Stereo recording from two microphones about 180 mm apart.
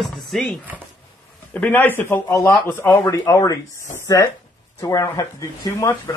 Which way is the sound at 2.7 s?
10° left (ahead or behind).